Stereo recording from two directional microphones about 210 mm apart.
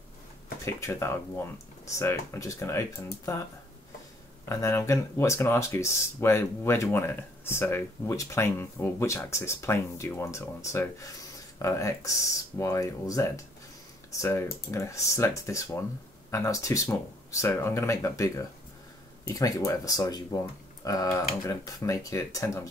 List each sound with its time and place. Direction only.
0.7 s speech: 15° left (ahead or behind)
4.5 s speech: 15° left (ahead or behind)